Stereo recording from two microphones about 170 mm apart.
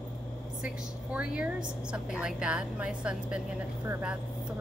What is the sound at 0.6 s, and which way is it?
A woman's voice, 5° right (ahead or behind).